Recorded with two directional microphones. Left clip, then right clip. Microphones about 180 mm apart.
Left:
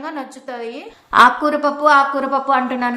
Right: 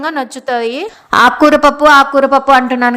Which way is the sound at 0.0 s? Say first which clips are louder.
Right 10 dB; 50° right (ahead or behind).